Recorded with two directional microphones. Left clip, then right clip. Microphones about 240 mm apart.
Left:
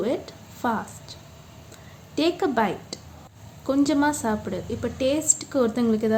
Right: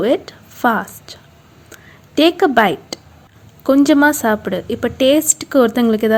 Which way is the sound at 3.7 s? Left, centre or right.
Right.